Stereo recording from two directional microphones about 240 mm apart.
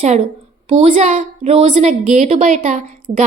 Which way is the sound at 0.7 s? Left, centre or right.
Right.